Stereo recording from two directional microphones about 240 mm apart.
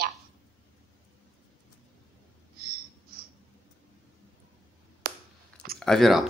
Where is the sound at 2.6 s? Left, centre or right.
Right.